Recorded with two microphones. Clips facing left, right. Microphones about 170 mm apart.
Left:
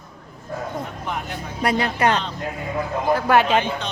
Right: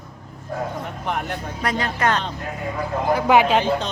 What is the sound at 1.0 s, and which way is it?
Speech, 55° right (ahead or behind).